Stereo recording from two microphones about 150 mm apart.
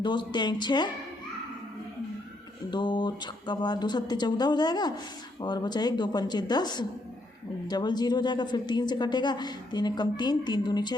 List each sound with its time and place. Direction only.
0.0 s a woman's voice: 30° left (ahead or behind)
2.6 s a woman's voice: 30° left (ahead or behind)